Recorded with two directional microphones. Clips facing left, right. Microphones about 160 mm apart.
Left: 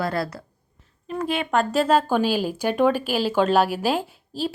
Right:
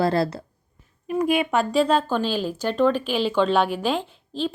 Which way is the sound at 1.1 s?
10° right (ahead or behind).